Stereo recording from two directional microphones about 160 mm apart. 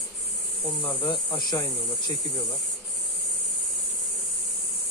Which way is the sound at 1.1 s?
25° left (ahead or behind).